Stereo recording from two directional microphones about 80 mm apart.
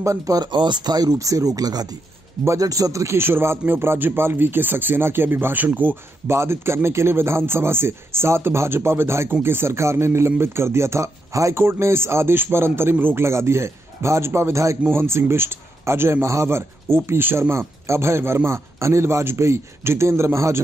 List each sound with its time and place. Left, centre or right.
0.0 s speech: right
0.4 s speech: right
6.3 s speech: right